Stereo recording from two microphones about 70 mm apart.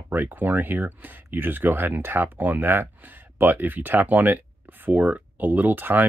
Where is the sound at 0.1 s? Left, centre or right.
Right.